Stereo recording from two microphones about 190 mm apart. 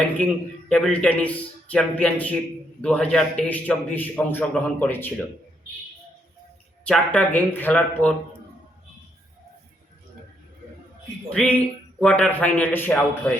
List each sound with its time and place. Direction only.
0.7 s a man's voice: 5° left (ahead or behind)
6.8 s a man's voice: 5° left (ahead or behind)
11.3 s a man's voice: 5° left (ahead or behind)